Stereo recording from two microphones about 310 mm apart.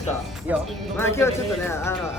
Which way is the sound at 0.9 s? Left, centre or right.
Centre.